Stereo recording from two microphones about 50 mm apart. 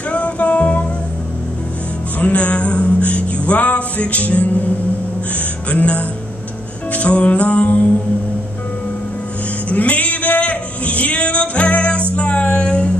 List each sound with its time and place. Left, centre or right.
0.1 s music: left
2.1 s music: left
9.7 s a sound: left